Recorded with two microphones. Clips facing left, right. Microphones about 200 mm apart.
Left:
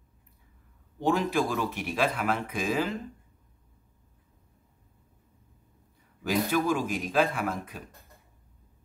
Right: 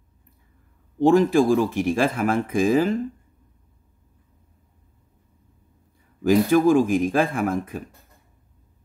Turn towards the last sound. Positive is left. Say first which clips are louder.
# right 8 dB
turn(degrees=-50)  # may be behind; listen again after turning